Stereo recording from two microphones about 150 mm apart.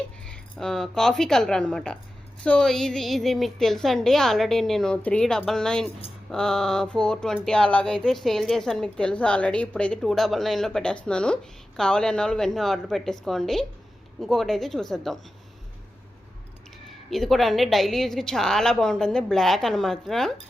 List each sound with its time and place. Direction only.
0.3 s speech: 5° left (ahead or behind)
17.1 s speech: centre (ahead or behind)